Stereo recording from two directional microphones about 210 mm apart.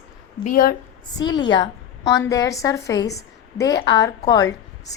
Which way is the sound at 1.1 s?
20° left (ahead or behind).